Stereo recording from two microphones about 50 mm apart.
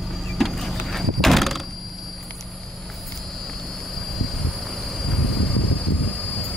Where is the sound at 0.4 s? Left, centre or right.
Centre.